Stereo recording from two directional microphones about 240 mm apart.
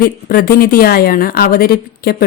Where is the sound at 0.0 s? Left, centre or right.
Left.